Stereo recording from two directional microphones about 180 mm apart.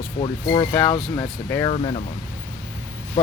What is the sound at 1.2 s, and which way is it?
Speech, 20° left (ahead or behind).